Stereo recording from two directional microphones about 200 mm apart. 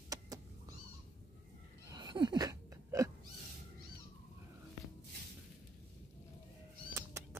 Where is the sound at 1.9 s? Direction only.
20° right (ahead or behind).